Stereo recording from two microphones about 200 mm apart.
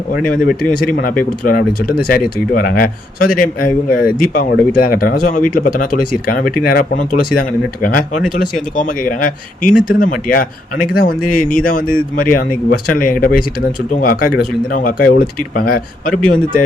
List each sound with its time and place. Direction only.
0.1 s a man's voice: 45° left (ahead or behind)